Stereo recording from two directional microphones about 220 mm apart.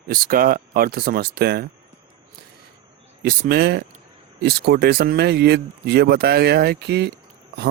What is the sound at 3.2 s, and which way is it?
Speech, 45° right (ahead or behind).